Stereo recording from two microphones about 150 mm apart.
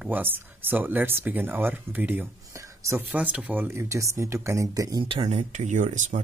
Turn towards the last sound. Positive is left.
turn(degrees=-55)  # may be behind; listen again after turning